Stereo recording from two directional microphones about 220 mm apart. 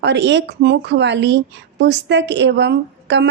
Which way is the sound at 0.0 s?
50° right (ahead or behind).